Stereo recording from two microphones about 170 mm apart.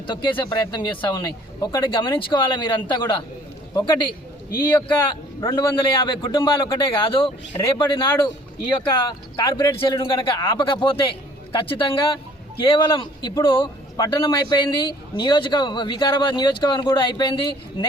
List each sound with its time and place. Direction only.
0.1 s a man's voice: 25° left (ahead or behind)